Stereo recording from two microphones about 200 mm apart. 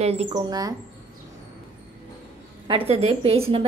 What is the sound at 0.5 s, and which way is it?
Speech, 20° right (ahead or behind).